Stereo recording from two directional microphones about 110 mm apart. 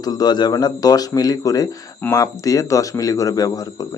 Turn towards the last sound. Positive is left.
turn(degrees=35)  # may be behind; listen again after turning